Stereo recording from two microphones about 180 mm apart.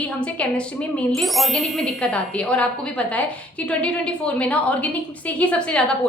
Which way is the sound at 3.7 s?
5° left (ahead or behind).